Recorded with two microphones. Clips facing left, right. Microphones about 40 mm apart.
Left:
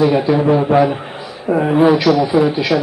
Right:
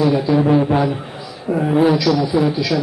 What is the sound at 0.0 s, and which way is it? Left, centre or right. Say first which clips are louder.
A man's voice: left 2 dB; left.